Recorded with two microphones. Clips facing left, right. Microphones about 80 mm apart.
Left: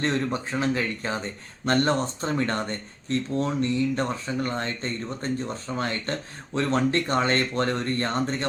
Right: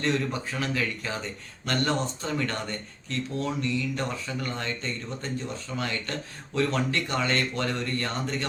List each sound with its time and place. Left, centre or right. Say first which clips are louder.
0.0 s speech: left 2 dB; left